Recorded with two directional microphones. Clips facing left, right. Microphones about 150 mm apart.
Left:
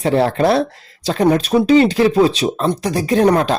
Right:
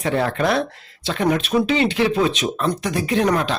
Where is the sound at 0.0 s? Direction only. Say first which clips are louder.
Left 5 dB; 30° left (ahead or behind).